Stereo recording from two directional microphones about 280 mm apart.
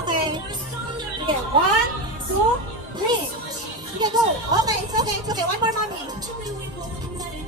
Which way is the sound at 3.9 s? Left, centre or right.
Centre.